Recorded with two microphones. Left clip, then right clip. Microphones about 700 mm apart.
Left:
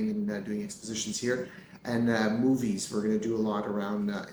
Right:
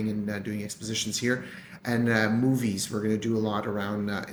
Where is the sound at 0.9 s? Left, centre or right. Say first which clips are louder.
Right 3 dB; right.